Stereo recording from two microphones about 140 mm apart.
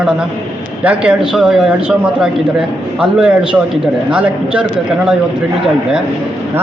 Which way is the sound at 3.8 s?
5° right (ahead or behind).